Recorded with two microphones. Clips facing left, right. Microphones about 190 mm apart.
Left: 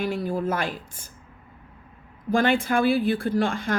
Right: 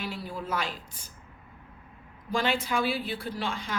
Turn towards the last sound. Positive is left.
turn(degrees=50)  # may be behind; listen again after turning